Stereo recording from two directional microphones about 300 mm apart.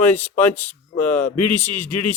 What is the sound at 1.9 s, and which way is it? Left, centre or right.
Speech, left.